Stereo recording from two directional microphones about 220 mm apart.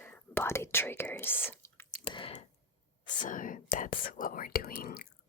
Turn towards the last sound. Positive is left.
turn(degrees=40)  # may be behind; listen again after turning